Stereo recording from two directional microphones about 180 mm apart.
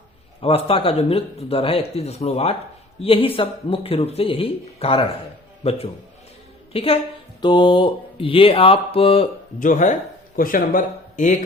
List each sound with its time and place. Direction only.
0.4 s speech: 30° left (ahead or behind)
9.6 s speech: 45° left (ahead or behind)